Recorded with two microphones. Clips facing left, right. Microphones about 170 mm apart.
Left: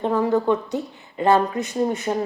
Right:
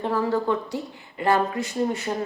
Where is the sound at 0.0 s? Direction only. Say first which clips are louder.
Left 4 dB; 20° left (ahead or behind).